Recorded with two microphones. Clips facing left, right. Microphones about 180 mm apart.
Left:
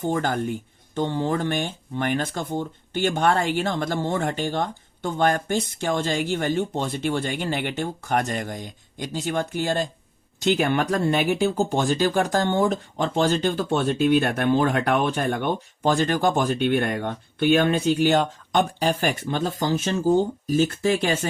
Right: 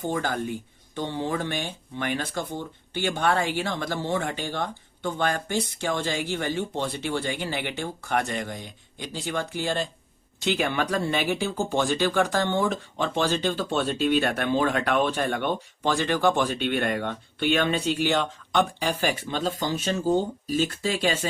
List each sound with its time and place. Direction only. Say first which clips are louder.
0.0 s speech: left 3 dB; 50° left (ahead or behind)
21.0 s speech: left 2 dB; 50° left (ahead or behind)